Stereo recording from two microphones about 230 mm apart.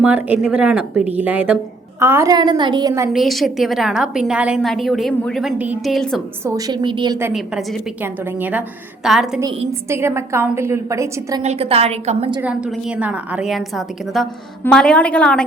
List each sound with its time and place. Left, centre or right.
0.0 s a woman's voice: centre
3.1 s a woman's voice: centre
6.4 s a woman's voice: centre
9.4 s a woman's voice: centre
11.4 s a woman's voice: right
12.4 s a woman's voice: centre